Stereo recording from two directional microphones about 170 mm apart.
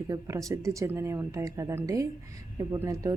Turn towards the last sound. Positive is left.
turn(degrees=-20)  # may be behind; listen again after turning